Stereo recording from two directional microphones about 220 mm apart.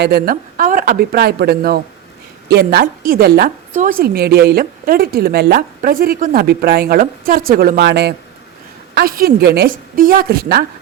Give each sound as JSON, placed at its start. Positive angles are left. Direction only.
{"t": 0.0, "sound": "a woman's voice", "side_deg": -45}